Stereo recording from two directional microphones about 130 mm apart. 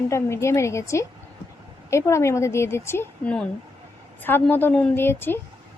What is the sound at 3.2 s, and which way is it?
A woman's voice, 5° left (ahead or behind).